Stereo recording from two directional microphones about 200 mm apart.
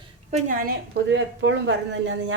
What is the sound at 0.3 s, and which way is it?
Speech, 35° right (ahead or behind).